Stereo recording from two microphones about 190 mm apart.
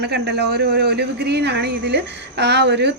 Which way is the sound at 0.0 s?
60° right (ahead or behind).